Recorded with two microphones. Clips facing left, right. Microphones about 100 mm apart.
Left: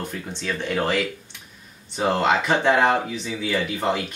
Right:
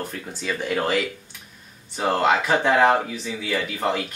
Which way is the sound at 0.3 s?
5° right (ahead or behind).